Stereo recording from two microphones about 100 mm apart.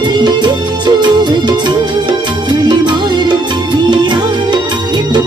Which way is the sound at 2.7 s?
45° right (ahead or behind).